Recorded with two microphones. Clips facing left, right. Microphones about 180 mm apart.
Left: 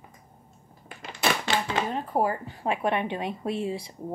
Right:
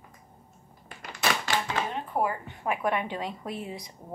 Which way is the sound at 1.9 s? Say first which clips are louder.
Left 4 dB; 40° left (ahead or behind).